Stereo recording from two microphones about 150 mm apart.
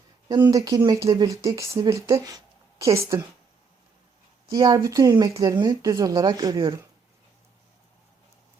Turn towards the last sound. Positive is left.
turn(degrees=-25)  # may be behind; listen again after turning